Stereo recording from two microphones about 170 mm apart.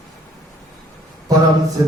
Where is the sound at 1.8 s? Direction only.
20° right (ahead or behind).